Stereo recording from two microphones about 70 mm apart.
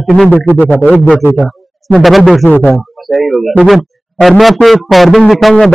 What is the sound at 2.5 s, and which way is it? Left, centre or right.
Speech, left.